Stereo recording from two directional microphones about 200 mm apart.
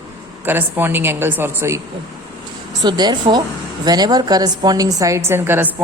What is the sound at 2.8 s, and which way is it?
A woman's voice, 20° right (ahead or behind).